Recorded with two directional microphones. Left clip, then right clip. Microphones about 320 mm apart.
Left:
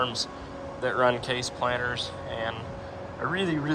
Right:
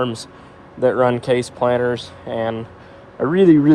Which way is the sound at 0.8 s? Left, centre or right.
Centre.